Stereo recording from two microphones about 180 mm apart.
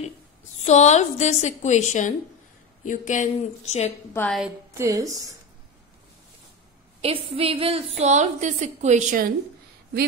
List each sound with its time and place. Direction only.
0.7 s a woman's voice: 40° left (ahead or behind)
4.1 s a woman's voice: 10° left (ahead or behind)
4.7 s a woman's voice: 20° right (ahead or behind)
7.0 s a woman's voice: 30° right (ahead or behind)